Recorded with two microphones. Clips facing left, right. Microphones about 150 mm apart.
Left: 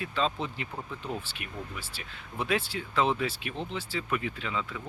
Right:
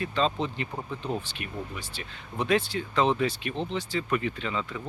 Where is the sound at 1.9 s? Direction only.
5° left (ahead or behind).